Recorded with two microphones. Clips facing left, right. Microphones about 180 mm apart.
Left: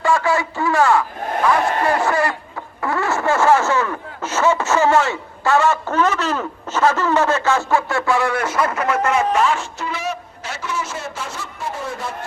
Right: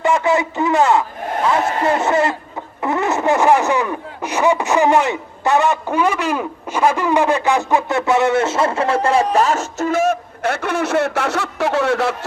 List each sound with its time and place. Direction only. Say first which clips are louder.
0.0 s speech: right 2 dB; 20° right (ahead or behind); by 12.1 s 75° right (ahead or behind)